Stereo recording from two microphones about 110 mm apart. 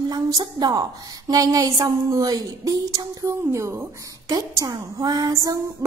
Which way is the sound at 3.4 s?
25° right (ahead or behind).